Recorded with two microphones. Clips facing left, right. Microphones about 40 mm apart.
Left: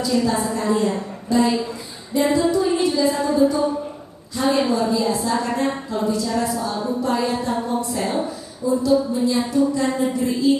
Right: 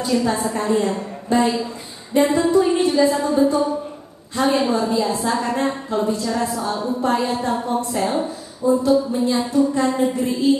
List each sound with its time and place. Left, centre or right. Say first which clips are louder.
0.0 s a woman's voice: even; right
2.1 s music: right 2 dB; right
4.4 s a woman's voice: right 1 dB; right